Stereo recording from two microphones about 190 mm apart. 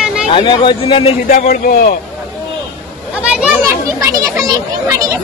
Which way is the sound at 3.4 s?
15° right (ahead or behind).